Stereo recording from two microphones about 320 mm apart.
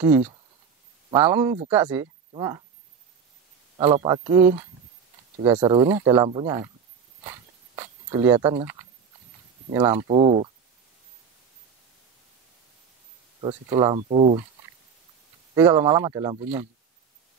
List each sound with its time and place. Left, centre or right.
1.1 s speech: centre
3.7 s speech: centre
7.2 s a sound: centre
9.7 s speech: centre
13.4 s speech: centre
15.5 s speech: centre